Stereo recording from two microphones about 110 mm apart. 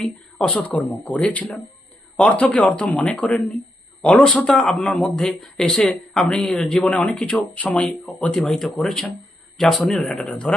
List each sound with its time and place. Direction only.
0.0 s speech: 5° left (ahead or behind)